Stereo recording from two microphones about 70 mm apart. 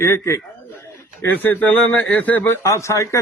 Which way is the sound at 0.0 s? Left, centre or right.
Left.